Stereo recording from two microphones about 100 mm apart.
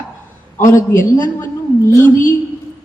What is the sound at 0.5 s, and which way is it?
A man's voice, 30° left (ahead or behind).